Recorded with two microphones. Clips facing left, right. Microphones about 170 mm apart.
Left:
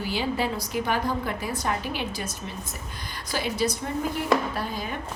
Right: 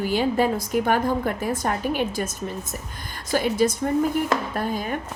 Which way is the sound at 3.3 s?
50° right (ahead or behind).